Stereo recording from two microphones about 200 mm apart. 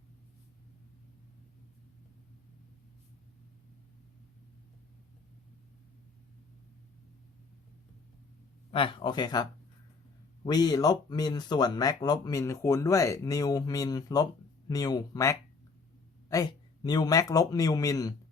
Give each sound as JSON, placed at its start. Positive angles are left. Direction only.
{"t": 8.7, "sound": "a man's voice", "side_deg": 25}